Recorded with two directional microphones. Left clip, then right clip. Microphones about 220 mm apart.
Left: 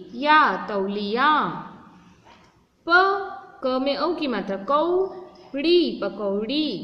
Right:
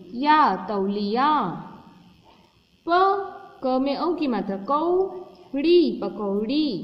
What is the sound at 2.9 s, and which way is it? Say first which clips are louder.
A woman's voice: left 1 dB; 20° right (ahead or behind).